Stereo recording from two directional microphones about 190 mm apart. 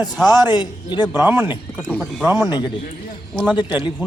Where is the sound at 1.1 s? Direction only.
10° right (ahead or behind).